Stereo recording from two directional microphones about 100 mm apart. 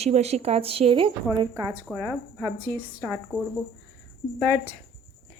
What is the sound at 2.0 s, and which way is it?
Speech, 15° left (ahead or behind).